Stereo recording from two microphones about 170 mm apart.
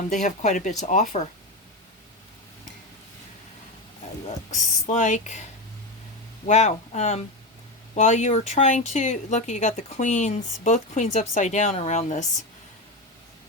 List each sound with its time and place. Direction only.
0.1 s speech: 45° left (ahead or behind)
4.5 s speech: 45° left (ahead or behind)